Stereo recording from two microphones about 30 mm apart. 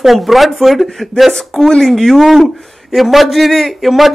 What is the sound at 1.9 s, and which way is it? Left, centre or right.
Speech, centre.